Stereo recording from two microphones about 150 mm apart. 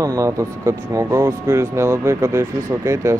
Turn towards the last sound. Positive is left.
turn(degrees=-20)  # may be behind; listen again after turning